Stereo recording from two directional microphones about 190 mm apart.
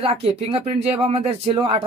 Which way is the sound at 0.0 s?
30° right (ahead or behind).